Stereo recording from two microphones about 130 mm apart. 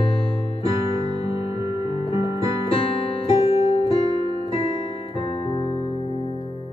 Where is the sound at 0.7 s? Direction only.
55° left (ahead or behind).